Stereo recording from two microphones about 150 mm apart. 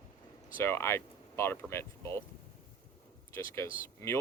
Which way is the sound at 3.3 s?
20° left (ahead or behind).